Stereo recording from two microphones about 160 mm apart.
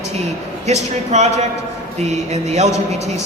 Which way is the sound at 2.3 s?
45° right (ahead or behind).